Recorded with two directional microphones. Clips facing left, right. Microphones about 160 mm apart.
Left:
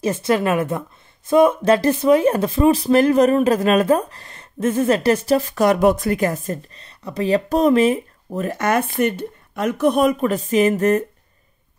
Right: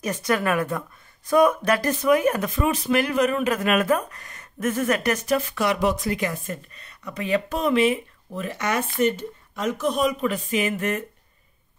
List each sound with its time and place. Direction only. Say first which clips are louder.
0.0 s a woman's voice: left 5 dB; 25° left (ahead or behind); by 10.3 s 55° left (ahead or behind)
10.3 s a woman's voice: left 8 dB; 40° left (ahead or behind)